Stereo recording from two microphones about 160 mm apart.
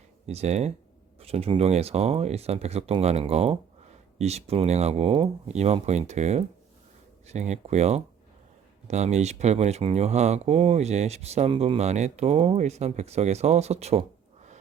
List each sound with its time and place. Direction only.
0.3 s speech: 40° right (ahead or behind)